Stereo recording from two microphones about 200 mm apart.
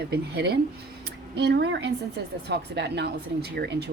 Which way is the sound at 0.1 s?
55° right (ahead or behind).